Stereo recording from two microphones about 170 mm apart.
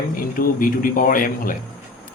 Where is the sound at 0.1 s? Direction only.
55° left (ahead or behind).